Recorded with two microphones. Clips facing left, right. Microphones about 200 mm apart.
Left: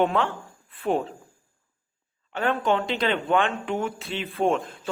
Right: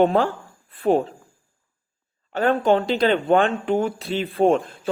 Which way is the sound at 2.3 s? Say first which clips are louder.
Right 5 dB; 35° right (ahead or behind).